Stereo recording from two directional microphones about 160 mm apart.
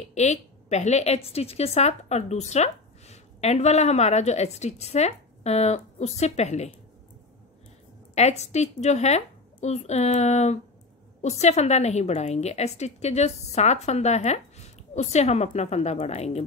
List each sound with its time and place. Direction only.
0.1 s a woman's voice: 45° left (ahead or behind)
8.1 s a woman's voice: 45° left (ahead or behind)